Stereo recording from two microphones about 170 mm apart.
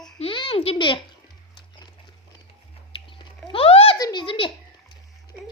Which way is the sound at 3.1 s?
30° left (ahead or behind).